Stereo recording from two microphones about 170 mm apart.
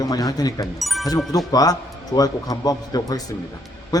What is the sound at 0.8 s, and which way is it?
Speech, centre (ahead or behind).